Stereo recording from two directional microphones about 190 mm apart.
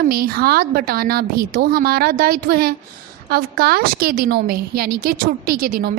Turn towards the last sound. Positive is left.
turn(degrees=-50)  # may be behind; listen again after turning